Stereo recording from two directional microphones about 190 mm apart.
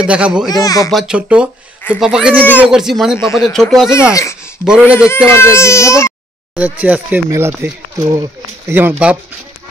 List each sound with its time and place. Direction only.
0.0 s speech: 5° right (ahead or behind)
0.5 s speech: 20° left (ahead or behind)
0.8 s speech: centre (ahead or behind)
3.3 s speech: 15° left (ahead or behind)
3.5 s speech: centre (ahead or behind)
4.1 s speech: 15° left (ahead or behind)
4.6 s speech: 5° right (ahead or behind)
5.1 s speech: 15° left (ahead or behind)
6.5 s speech: 10° right (ahead or behind)